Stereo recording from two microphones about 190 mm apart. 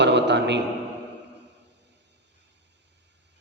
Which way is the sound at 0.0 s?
65° right (ahead or behind).